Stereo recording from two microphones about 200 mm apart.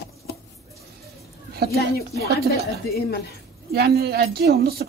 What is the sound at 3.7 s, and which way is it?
A man's voice, 50° right (ahead or behind).